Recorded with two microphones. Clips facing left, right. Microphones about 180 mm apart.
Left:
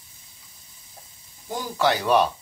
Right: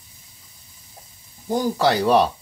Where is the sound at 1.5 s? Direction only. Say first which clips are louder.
Right 4 dB; 40° right (ahead or behind).